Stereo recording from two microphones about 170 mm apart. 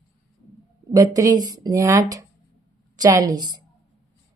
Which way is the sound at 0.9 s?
20° right (ahead or behind).